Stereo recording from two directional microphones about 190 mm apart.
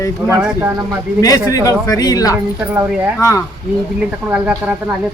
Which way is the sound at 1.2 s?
20° left (ahead or behind).